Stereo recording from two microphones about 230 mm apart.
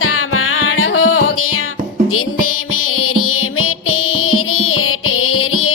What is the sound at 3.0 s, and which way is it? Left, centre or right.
Music, left.